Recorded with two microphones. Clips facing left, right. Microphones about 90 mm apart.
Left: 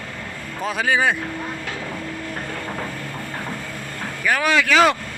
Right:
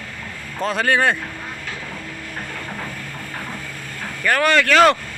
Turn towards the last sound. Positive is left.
turn(degrees=5)  # may be behind; listen again after turning